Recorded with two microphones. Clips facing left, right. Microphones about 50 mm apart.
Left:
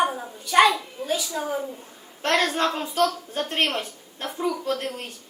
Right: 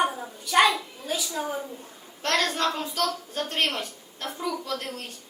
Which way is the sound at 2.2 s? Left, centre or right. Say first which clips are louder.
Left 3 dB; centre.